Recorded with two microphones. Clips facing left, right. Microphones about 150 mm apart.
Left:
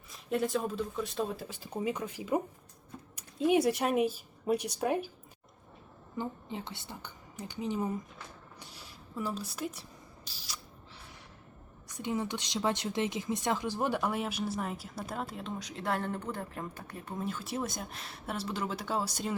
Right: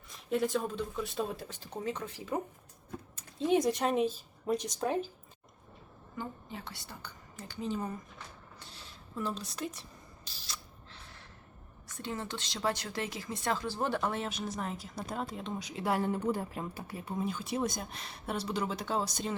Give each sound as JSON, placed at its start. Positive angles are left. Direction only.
{"t": 0.1, "sound": "speech", "side_deg": 0}
{"t": 6.1, "sound": "a woman's voice", "side_deg": 20}
{"t": 8.5, "sound": "a sound", "side_deg": 10}
{"t": 10.2, "sound": "single-lens reflex camera", "side_deg": 10}
{"t": 11.9, "sound": "speech", "side_deg": 15}